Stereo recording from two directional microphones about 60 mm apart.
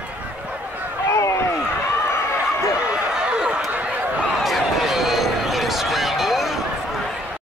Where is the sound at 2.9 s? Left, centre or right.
Centre.